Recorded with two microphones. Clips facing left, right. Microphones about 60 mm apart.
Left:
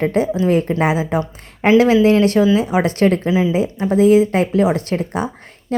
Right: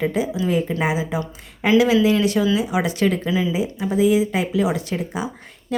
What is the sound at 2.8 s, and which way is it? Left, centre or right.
Speech, left.